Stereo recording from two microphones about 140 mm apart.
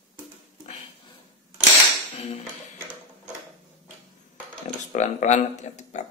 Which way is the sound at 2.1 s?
45° left (ahead or behind).